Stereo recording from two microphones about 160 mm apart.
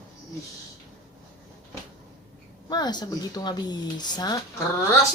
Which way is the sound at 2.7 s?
25° left (ahead or behind).